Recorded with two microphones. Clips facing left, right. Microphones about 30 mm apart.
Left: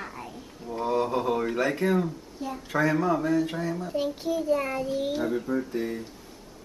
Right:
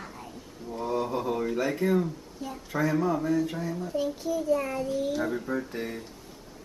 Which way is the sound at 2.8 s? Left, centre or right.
Left.